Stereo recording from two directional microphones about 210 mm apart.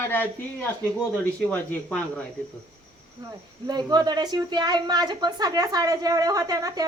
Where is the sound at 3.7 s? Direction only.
20° right (ahead or behind).